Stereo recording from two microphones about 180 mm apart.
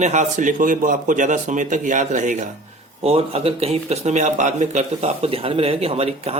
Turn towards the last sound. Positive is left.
turn(degrees=-35)  # may be behind; listen again after turning